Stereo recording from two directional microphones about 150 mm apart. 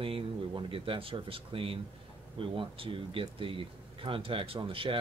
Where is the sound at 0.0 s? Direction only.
35° right (ahead or behind).